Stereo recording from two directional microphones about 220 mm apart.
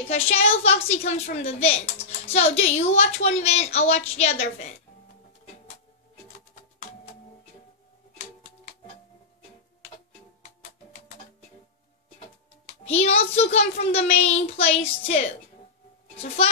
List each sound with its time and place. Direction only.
0.1 s a woman's voice: 25° left (ahead or behind)
12.8 s a woman's voice: 30° left (ahead or behind)